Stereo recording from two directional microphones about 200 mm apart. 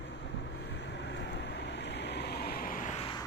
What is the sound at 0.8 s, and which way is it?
Vehicle, 60° left (ahead or behind).